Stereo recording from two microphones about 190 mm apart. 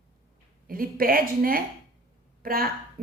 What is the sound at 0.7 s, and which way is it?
A woman's voice, 50° right (ahead or behind).